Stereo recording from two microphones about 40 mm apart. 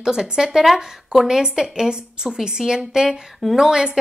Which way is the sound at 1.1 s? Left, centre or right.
Centre.